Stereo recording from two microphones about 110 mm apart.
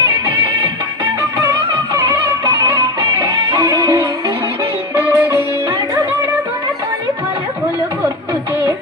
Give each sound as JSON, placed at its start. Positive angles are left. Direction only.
{"t": 3.2, "sound": "music", "side_deg": -40}
{"t": 4.9, "sound": "music", "side_deg": -20}